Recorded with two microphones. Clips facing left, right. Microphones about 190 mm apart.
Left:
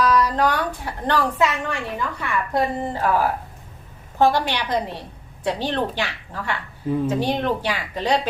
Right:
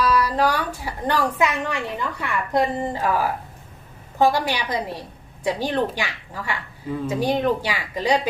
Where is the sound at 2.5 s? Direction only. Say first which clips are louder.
Right 2 dB; 15° right (ahead or behind).